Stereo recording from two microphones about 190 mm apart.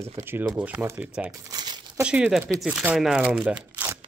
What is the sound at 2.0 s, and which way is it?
Speech, 5° right (ahead or behind).